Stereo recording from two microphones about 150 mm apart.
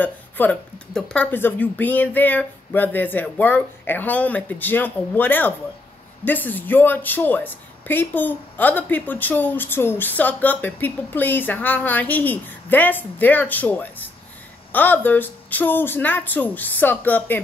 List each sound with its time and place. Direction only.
0.0 s speech: 10° left (ahead or behind)